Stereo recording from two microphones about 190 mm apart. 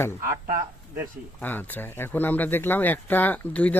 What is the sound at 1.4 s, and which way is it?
Speech, 10° left (ahead or behind).